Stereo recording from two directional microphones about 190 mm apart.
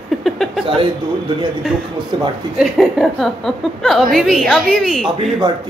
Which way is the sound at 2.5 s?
Centre (ahead or behind).